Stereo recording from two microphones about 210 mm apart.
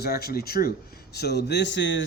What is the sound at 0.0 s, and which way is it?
Speech, 50° left (ahead or behind).